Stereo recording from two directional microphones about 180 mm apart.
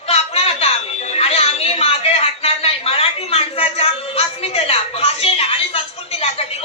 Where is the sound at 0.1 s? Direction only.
35° left (ahead or behind).